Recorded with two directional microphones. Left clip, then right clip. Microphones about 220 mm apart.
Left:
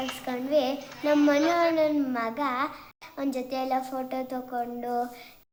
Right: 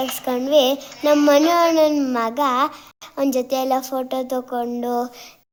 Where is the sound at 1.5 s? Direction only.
50° right (ahead or behind).